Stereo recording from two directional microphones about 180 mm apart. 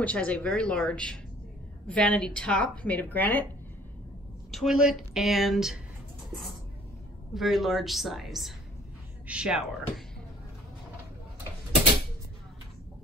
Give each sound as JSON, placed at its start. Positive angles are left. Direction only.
{"t": 0.0, "sound": "a woman's voice", "side_deg": 5}
{"t": 4.5, "sound": "a woman's voice", "side_deg": 0}
{"t": 7.3, "sound": "a woman's voice", "side_deg": 0}